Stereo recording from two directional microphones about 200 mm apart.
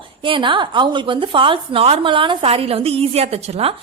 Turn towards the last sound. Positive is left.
turn(degrees=-30)  # may be behind; listen again after turning